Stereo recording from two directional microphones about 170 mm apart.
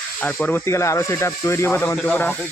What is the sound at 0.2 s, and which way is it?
Speech, 10° left (ahead or behind).